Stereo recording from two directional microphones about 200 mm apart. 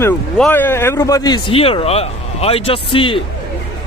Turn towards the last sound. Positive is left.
turn(degrees=25)  # may be behind; listen again after turning